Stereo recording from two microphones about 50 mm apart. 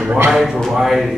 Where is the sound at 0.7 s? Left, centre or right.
Centre.